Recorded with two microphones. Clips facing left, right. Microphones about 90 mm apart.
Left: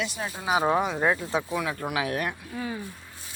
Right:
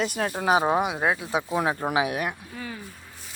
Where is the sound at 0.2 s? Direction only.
65° right (ahead or behind).